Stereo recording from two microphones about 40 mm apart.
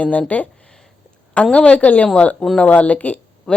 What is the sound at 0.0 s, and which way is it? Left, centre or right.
Speech, left.